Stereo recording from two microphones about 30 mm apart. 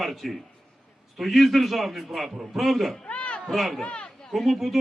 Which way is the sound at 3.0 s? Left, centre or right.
Left.